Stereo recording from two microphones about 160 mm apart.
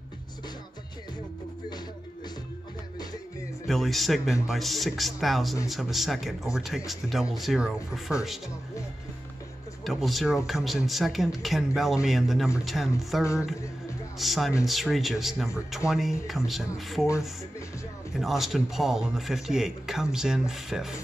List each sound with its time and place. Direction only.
3.6 s speech: centre (ahead or behind)
9.8 s speech: centre (ahead or behind)
13.2 s speech: 20° left (ahead or behind)
14.1 s speech: centre (ahead or behind)
18.1 s speech: centre (ahead or behind)